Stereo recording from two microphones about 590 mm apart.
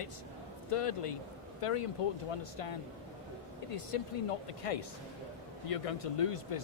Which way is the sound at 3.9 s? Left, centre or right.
Left.